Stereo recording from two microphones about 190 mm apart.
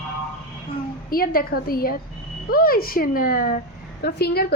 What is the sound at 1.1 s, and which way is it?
A woman's voice, 50° left (ahead or behind).